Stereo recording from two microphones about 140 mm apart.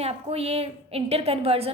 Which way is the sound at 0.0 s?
45° right (ahead or behind).